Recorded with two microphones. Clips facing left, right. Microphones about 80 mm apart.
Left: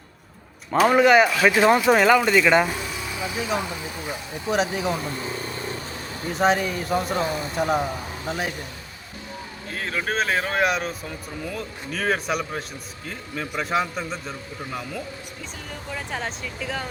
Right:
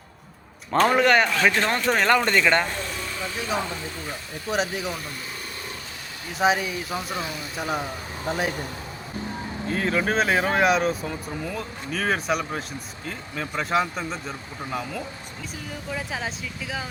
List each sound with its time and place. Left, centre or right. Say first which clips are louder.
0.7 s speech: left 3 dB; centre
4.5 s speech: left 3 dB; centre
6.4 s speech: left 1 dB; centre
7.1 s speech: left 6 dB; left
7.5 s speech: left 4 dB; centre
9.6 s speech: right 4 dB; centre